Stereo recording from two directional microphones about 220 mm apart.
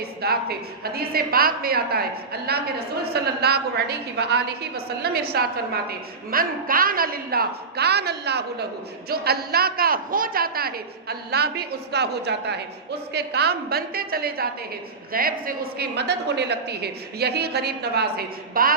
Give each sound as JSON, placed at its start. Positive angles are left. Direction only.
{"t": 0.0, "sound": "a woman's voice", "side_deg": -45}